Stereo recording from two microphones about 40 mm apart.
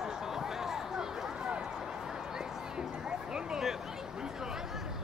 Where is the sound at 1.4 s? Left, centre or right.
Right.